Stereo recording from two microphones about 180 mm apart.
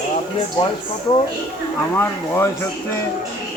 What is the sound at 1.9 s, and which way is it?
Speech, 15° left (ahead or behind).